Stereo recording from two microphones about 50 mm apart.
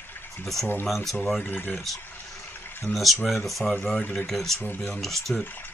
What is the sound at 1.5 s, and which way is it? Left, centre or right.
Speech, left.